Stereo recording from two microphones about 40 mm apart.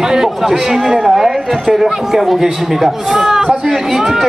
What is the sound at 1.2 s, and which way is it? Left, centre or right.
Speech, centre.